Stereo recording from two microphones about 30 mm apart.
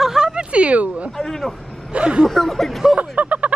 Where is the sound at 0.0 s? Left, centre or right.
Centre.